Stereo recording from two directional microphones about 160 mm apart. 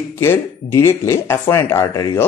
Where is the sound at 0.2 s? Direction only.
15° left (ahead or behind).